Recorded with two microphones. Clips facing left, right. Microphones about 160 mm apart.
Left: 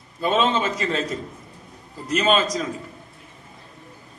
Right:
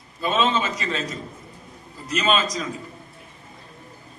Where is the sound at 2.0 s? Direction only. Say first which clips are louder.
Left 3 dB; 50° left (ahead or behind).